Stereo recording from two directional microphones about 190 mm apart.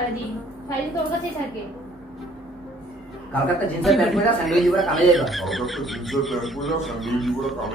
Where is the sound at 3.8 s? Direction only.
Centre (ahead or behind).